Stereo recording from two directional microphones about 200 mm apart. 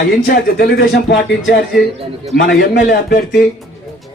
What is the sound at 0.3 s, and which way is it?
Speech, 50° left (ahead or behind).